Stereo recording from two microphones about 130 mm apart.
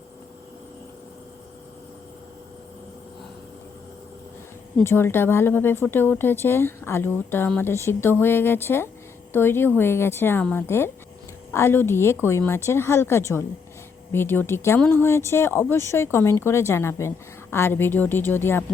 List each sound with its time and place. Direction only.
4.8 s a woman's voice: 20° left (ahead or behind)